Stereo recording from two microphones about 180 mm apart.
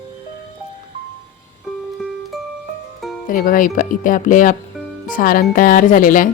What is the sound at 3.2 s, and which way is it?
Speech, 50° left (ahead or behind).